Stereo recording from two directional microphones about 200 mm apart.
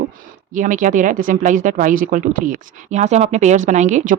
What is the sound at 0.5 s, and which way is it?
Speech, 40° right (ahead or behind).